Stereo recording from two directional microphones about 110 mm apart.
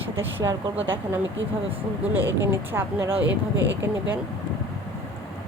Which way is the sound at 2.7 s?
20° right (ahead or behind).